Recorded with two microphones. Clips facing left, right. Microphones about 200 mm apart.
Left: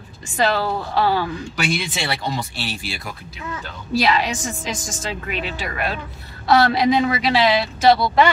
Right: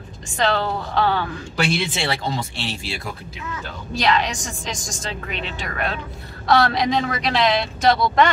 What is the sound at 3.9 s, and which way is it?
A woman's voice, 5° left (ahead or behind).